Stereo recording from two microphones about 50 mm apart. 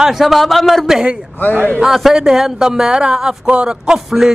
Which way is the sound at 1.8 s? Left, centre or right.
Centre.